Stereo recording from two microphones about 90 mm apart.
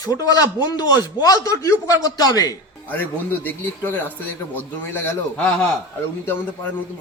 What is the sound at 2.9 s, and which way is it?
A man's voice, 20° left (ahead or behind).